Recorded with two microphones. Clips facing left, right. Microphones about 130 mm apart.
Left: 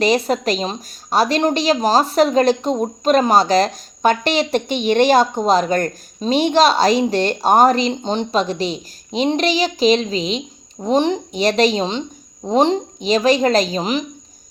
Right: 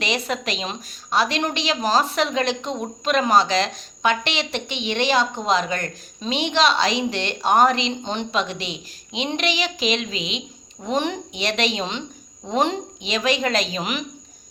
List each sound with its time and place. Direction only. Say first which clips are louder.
0.0 s a woman's voice: left 9 dB; 40° left (ahead or behind)